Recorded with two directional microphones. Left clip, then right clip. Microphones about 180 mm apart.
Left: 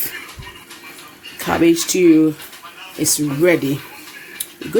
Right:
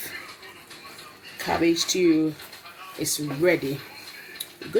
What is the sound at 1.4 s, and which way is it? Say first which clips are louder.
Speech: left 7 dB; 40° left (ahead or behind).